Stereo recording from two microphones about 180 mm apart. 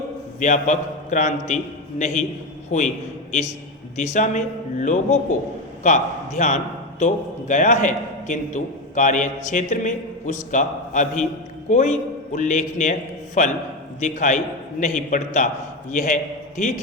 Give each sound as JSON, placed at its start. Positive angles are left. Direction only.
{"t": 0.3, "sound": "a man's voice", "side_deg": 45}
{"t": 3.9, "sound": "a man's voice", "side_deg": 40}